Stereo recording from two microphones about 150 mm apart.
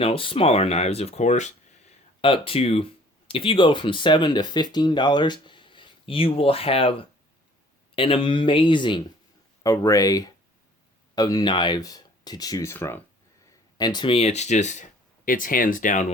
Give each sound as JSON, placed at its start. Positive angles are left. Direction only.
{"t": 0.0, "sound": "speech", "side_deg": 35}
{"t": 2.2, "sound": "speech", "side_deg": 35}
{"t": 7.9, "sound": "speech", "side_deg": 35}
{"t": 9.6, "sound": "speech", "side_deg": 20}
{"t": 13.7, "sound": "speech", "side_deg": 30}